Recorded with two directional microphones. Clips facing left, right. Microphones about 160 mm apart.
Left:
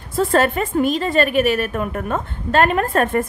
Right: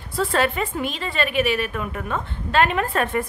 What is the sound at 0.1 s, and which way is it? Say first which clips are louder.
A woman's voice: left 5 dB; 45° left (ahead or behind).